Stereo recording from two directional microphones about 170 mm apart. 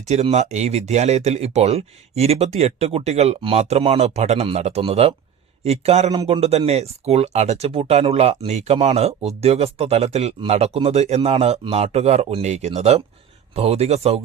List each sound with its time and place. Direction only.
0.0 s speech: 40° right (ahead or behind)
6.1 s speech: 25° right (ahead or behind)